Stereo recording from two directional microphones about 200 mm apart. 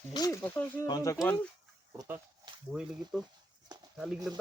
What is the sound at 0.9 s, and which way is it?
Speech, 15° left (ahead or behind).